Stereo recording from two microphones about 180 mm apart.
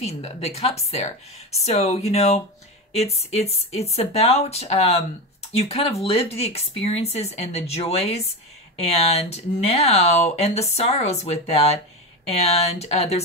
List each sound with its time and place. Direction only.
0.0 s speech: 35° left (ahead or behind)